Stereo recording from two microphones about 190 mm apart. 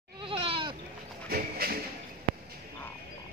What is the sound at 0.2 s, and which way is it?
Goat, 30° right (ahead or behind).